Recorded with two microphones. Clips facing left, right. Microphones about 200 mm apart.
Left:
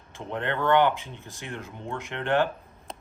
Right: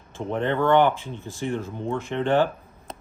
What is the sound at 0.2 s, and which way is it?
Speech, 15° right (ahead or behind).